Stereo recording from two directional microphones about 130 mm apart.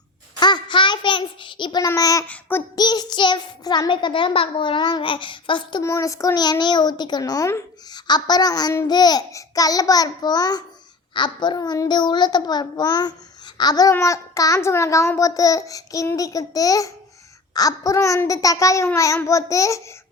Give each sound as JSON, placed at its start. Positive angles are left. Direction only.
{"t": 0.3, "sound": "child singing", "side_deg": 35}
{"t": 1.9, "sound": "a child's voice", "side_deg": 25}
{"t": 2.2, "sound": "child singing", "side_deg": 15}
{"t": 2.7, "sound": "a child's voice", "side_deg": 30}
{"t": 5.8, "sound": "a child's voice", "side_deg": 25}